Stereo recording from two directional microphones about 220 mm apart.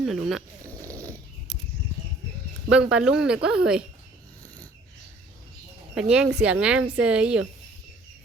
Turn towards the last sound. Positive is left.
turn(degrees=-5)  # may be behind; listen again after turning